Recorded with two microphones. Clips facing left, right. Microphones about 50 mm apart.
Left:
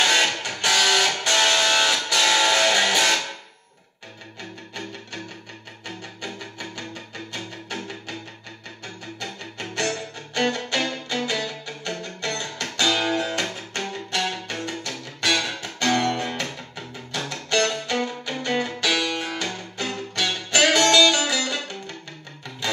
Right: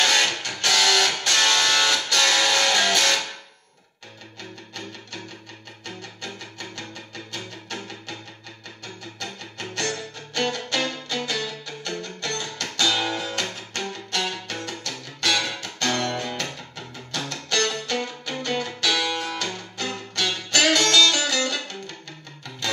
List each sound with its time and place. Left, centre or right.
0.0 s music: centre
4.4 s music: centre